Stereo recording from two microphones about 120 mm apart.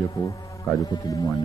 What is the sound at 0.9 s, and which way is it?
Speech, 25° left (ahead or behind).